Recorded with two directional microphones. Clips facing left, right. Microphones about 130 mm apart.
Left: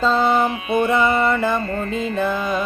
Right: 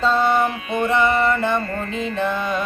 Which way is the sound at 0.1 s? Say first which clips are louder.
Left 1 dB; 20° left (ahead or behind).